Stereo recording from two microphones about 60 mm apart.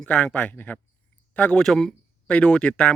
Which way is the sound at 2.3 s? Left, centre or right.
Centre.